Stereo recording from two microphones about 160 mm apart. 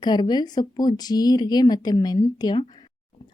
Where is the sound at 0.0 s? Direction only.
25° left (ahead or behind).